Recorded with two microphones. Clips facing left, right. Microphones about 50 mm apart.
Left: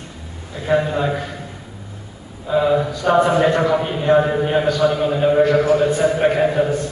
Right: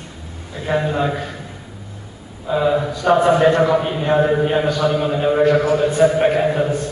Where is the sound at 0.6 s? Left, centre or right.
Centre.